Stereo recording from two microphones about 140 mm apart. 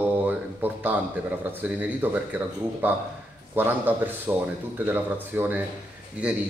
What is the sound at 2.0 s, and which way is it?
Speech, 15° right (ahead or behind).